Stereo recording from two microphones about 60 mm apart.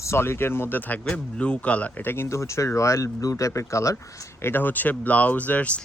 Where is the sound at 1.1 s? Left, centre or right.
Left.